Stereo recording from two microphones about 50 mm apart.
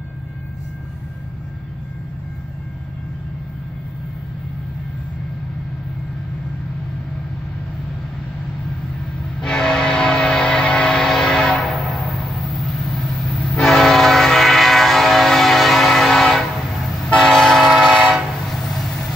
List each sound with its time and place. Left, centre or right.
9.4 s vehicle: centre
11.1 s train: centre
11.6 s vehicle: centre
13.6 s train: centre
18.4 s vehicle: centre